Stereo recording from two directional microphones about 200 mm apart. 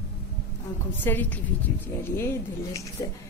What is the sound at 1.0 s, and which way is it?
Speech, 10° left (ahead or behind).